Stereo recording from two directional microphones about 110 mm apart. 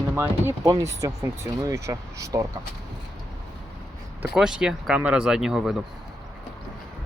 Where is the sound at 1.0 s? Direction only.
35° right (ahead or behind).